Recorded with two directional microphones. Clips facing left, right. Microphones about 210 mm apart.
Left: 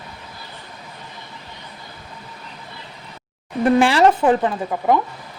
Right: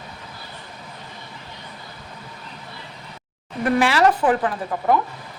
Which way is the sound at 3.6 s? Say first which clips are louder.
Left 3 dB; 30° left (ahead or behind).